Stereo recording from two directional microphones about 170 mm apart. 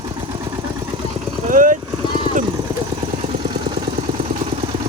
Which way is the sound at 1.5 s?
50° right (ahead or behind).